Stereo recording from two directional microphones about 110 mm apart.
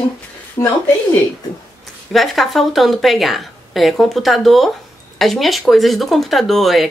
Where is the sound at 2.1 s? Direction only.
Centre (ahead or behind).